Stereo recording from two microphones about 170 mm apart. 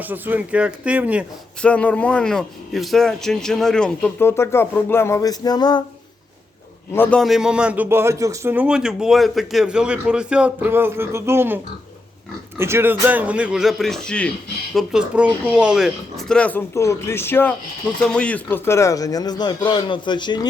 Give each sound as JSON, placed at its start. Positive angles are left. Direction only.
{"t": 0.0, "sound": "speech", "side_deg": -10}
{"t": 1.6, "sound": "a man's voice", "side_deg": 5}
{"t": 6.9, "sound": "a man's voice", "side_deg": 10}